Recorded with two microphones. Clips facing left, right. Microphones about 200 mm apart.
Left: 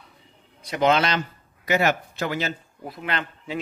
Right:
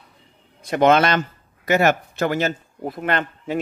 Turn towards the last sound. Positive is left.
turn(degrees=-50)  # may be behind; listen again after turning